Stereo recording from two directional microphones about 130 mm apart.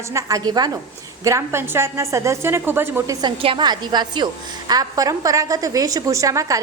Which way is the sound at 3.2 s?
40° right (ahead or behind).